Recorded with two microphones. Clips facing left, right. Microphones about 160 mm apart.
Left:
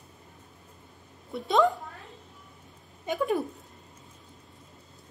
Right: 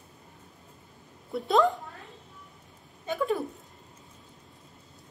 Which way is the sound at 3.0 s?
15° left (ahead or behind).